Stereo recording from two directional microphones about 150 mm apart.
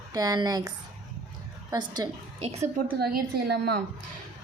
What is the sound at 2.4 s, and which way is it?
Speech, 40° right (ahead or behind).